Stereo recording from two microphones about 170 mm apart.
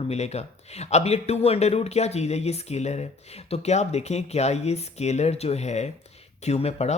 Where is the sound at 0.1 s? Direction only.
40° left (ahead or behind).